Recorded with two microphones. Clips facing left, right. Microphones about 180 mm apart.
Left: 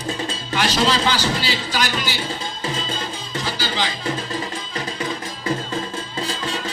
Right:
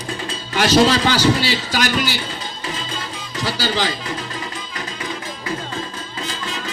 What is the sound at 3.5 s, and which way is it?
Music, 40° right (ahead or behind).